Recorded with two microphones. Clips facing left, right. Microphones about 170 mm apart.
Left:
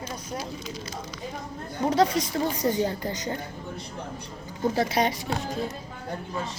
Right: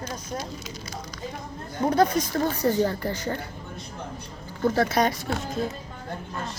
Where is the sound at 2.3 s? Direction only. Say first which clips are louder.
Right 2 dB; 15° left (ahead or behind).